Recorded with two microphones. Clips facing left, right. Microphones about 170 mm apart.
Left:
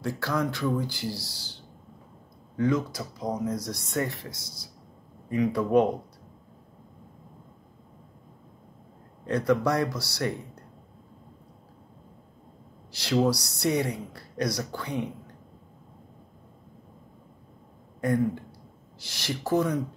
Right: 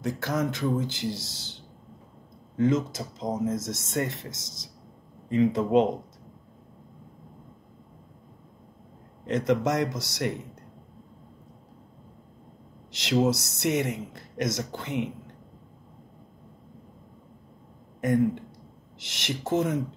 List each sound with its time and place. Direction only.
0.0 s speech: 20° right (ahead or behind)
9.2 s speech: 20° right (ahead or behind)
13.2 s speech: 20° right (ahead or behind)
18.0 s speech: 20° right (ahead or behind)